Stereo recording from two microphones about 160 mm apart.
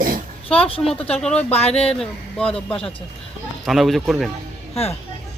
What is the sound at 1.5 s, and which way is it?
Speech, 40° left (ahead or behind).